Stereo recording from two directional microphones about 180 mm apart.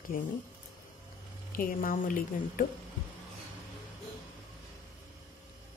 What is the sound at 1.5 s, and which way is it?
Speech, 50° left (ahead or behind).